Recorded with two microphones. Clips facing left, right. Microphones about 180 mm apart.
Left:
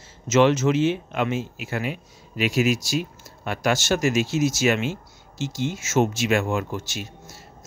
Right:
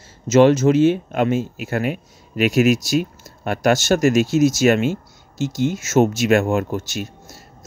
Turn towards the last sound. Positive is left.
turn(degrees=-45)  # may be behind; listen again after turning